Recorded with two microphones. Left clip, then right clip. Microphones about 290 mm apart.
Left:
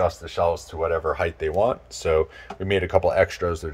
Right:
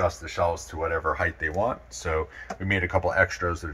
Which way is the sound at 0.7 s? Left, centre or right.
Left.